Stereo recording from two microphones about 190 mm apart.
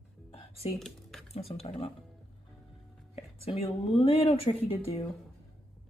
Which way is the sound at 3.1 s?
30° left (ahead or behind).